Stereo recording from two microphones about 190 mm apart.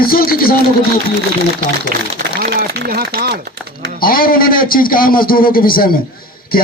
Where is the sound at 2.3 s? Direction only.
55° right (ahead or behind).